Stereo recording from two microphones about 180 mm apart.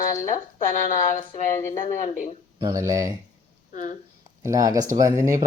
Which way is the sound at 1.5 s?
15° left (ahead or behind).